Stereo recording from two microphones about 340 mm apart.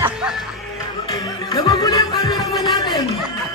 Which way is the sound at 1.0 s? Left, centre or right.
Centre.